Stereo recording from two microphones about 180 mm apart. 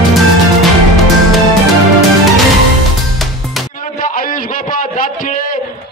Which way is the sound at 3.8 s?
50° left (ahead or behind).